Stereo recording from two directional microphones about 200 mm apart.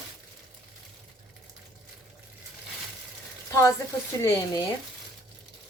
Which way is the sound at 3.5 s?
15° left (ahead or behind).